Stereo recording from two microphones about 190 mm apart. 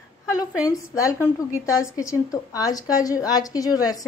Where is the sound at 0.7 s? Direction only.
15° left (ahead or behind).